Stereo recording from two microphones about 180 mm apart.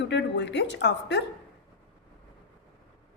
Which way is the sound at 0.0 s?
70° left (ahead or behind).